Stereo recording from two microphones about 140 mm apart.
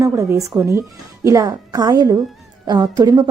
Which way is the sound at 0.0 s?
20° right (ahead or behind).